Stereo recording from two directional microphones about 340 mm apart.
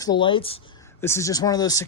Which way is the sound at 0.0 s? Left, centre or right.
Centre.